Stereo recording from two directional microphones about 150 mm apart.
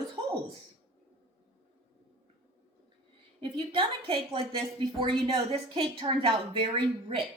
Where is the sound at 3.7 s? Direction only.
35° right (ahead or behind).